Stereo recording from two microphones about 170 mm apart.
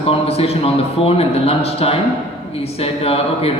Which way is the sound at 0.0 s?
35° left (ahead or behind).